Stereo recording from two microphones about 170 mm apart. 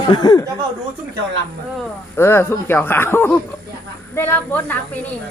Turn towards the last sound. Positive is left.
turn(degrees=10)  # may be behind; listen again after turning